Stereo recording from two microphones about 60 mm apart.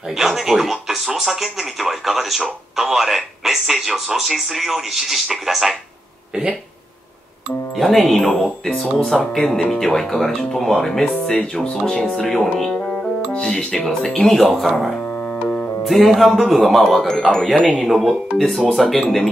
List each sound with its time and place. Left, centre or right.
0.1 s speech: centre
7.7 s speech: centre
12.7 s music: centre
13.8 s speech: centre
15.0 s music: left
15.8 s music: centre
16.3 s speech: centre
17.9 s speech: centre